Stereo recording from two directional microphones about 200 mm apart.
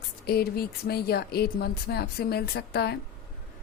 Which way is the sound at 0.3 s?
50° left (ahead or behind).